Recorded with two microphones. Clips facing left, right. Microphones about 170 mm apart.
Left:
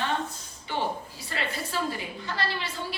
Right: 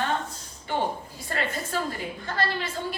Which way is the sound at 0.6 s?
50° right (ahead or behind).